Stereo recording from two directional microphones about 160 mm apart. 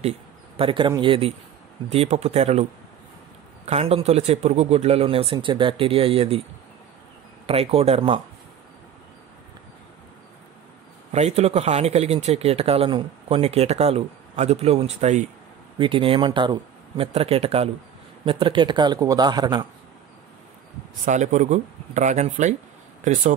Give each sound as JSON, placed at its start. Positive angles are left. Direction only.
{"t": 0.6, "sound": "speech", "side_deg": -30}
{"t": 3.6, "sound": "speech", "side_deg": -40}
{"t": 7.4, "sound": "speech", "side_deg": -40}
{"t": 11.1, "sound": "speech", "side_deg": -45}
{"t": 15.8, "sound": "speech", "side_deg": -35}
{"t": 21.0, "sound": "speech", "side_deg": -50}